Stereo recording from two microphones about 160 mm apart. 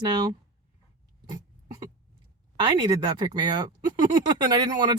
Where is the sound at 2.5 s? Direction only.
30° right (ahead or behind).